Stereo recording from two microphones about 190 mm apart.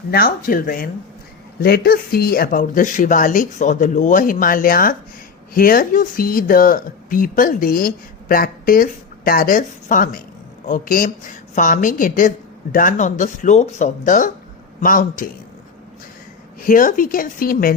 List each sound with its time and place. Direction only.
0.1 s speech: 50° left (ahead or behind)
16.6 s speech: 45° left (ahead or behind)